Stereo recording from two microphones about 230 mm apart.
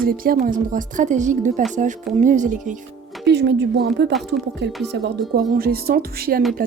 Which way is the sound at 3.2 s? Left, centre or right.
Right.